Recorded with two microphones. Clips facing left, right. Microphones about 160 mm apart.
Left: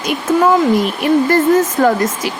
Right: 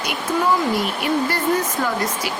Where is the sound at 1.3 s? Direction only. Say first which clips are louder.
Left 9 dB; 45° left (ahead or behind).